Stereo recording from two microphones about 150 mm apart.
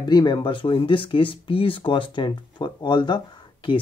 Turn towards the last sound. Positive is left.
turn(degrees=30)  # may be behind; listen again after turning